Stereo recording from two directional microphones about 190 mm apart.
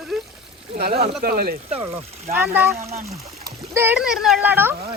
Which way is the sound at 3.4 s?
10° right (ahead or behind).